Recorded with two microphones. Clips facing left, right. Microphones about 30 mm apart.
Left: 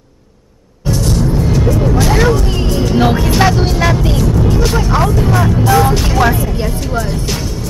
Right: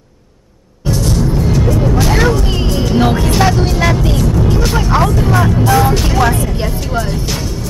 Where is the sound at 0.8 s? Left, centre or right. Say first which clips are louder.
Even; centre.